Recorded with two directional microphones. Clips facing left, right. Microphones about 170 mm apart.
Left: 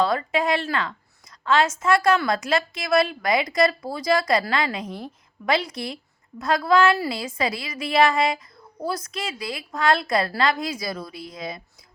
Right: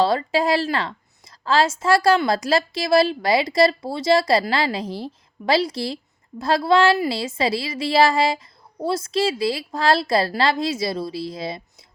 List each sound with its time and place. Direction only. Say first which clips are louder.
0.0 s a woman's voice: right 3 dB; 30° right (ahead or behind)